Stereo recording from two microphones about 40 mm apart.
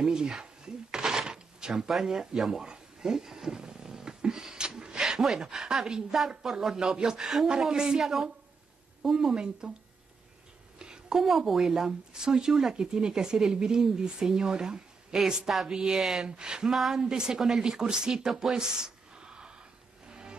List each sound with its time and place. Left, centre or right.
0.0 s a sound: centre
4.9 s a woman's voice: centre
9.3 s speech: right
10.8 s a sound: centre
11.2 s a woman's voice: centre
16.3 s speech: centre
16.7 s speech: centre
17.0 s a woman's voice: centre
18.3 s a sound: centre
20.1 s music: right